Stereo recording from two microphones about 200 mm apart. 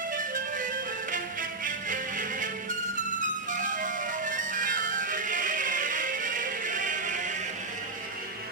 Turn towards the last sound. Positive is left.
turn(degrees=-40)  # may be behind; listen again after turning